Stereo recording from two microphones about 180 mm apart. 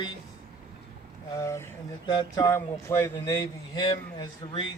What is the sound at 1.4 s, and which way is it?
Speech, 15° left (ahead or behind).